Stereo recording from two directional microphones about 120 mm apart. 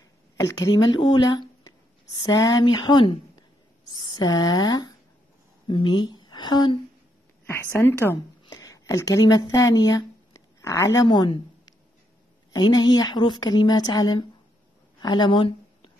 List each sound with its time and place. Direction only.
0.4 s a woman's voice: 25° left (ahead or behind)
7.4 s a woman's voice: 20° left (ahead or behind); by 14.2 s 35° left (ahead or behind)
15.0 s a sound: 35° left (ahead or behind)